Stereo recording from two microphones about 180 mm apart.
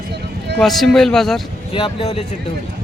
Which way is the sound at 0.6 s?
Centre (ahead or behind).